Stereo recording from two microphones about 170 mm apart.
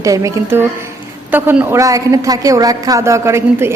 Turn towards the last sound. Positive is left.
turn(degrees=-15)  # may be behind; listen again after turning